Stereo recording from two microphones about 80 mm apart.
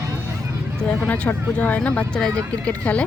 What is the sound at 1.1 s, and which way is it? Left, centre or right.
Speech, centre.